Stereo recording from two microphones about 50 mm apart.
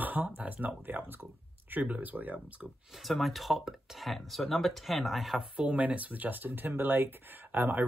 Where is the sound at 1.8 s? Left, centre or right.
Right.